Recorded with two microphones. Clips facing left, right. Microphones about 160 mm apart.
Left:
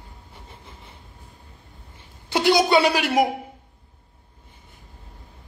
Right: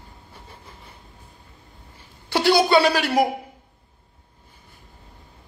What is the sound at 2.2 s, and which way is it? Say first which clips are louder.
Speech: even; 20° left (ahead or behind).